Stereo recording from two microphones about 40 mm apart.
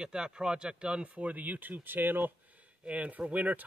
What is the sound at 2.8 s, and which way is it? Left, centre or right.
Speech, right.